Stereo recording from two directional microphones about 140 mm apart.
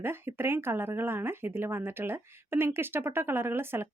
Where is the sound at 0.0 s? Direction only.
15° right (ahead or behind).